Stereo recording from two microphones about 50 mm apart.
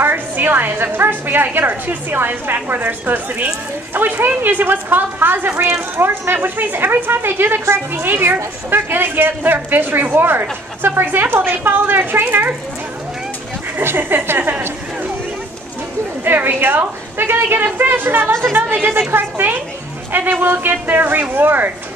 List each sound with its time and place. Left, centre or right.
0.0 s a woman's voice: right
13.7 s a woman's voice: right
16.3 s a woman's voice: right